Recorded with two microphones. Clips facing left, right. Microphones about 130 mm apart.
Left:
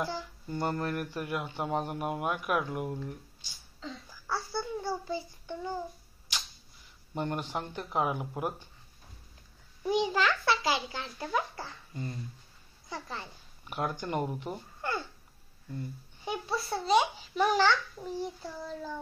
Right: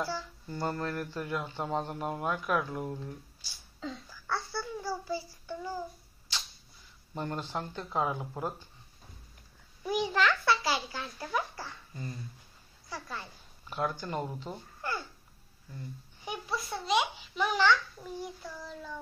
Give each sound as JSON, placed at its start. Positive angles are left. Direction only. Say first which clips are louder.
{"t": 0.0, "sound": "speech", "louder": "even", "side_deg": 20}
{"t": 4.5, "sound": "child singing", "louder": "left 2 dB", "side_deg": 25}
{"t": 7.2, "sound": "speech", "louder": "left 2 dB", "side_deg": 15}
{"t": 9.8, "sound": "a child's voice", "louder": "left 1 dB", "side_deg": 25}
{"t": 14.8, "sound": "speech", "louder": "left 2 dB", "side_deg": 25}
{"t": 16.3, "sound": "a child's voice", "louder": "left 3 dB", "side_deg": 30}